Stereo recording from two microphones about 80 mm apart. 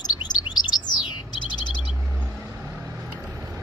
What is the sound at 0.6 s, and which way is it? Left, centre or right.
Bird, left.